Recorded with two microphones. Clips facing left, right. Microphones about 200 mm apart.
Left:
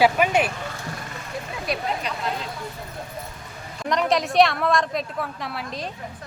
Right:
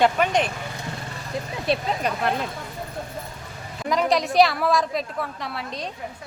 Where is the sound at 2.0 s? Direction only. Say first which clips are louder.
Right 5 dB; 50° right (ahead or behind).